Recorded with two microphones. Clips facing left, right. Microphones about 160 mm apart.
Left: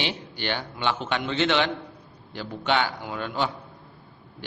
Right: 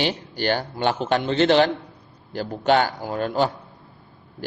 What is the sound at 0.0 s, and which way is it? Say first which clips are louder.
A man's voice: right 6 dB; 40° right (ahead or behind).